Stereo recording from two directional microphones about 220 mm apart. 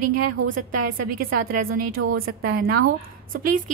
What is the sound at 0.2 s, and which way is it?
A woman's voice, 40° right (ahead or behind).